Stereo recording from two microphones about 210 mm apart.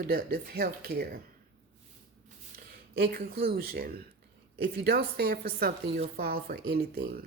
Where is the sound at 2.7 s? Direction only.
45° right (ahead or behind).